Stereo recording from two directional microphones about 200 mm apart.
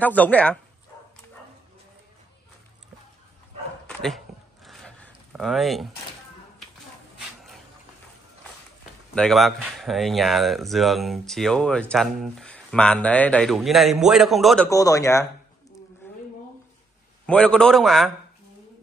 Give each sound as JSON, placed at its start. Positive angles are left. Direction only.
{"t": 0.0, "sound": "speech", "side_deg": 5}
{"t": 3.8, "sound": "dog", "side_deg": 0}
{"t": 4.6, "sound": "a sound", "side_deg": 5}
{"t": 9.1, "sound": "speech", "side_deg": 5}
{"t": 14.7, "sound": "speech", "side_deg": 15}
{"t": 17.3, "sound": "speech", "side_deg": 5}